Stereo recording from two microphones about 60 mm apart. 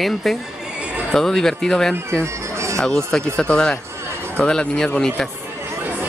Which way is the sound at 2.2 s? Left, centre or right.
Right.